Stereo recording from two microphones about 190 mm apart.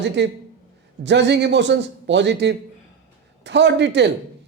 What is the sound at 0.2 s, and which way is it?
A man's voice, 65° right (ahead or behind).